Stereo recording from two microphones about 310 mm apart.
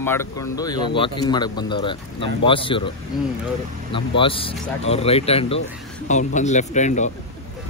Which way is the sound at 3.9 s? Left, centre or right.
Centre.